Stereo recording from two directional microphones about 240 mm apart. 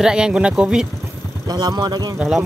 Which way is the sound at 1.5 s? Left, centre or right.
Centre.